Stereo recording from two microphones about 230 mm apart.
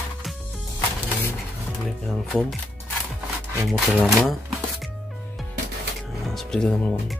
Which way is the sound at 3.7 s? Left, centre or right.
Centre.